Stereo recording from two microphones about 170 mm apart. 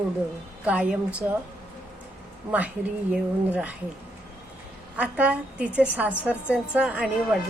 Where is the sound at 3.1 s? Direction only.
5° right (ahead or behind).